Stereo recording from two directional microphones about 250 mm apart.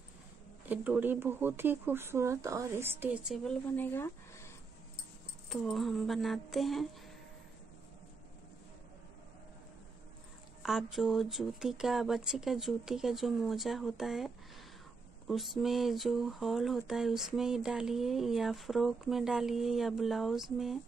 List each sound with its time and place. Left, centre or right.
0.7 s speech: centre
3.4 s speech: centre
5.5 s speech: centre
10.6 s speech: centre